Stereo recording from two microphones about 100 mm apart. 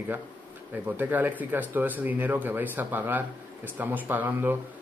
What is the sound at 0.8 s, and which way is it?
Speech, 15° right (ahead or behind).